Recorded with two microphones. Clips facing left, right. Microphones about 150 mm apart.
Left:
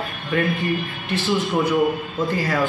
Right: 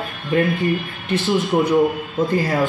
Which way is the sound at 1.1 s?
Centre (ahead or behind).